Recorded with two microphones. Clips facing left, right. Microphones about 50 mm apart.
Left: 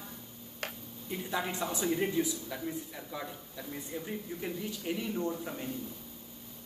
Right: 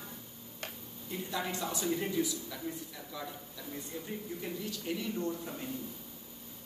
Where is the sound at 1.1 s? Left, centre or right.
Centre.